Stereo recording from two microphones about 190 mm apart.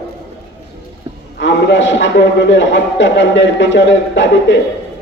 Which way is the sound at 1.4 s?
70° left (ahead or behind).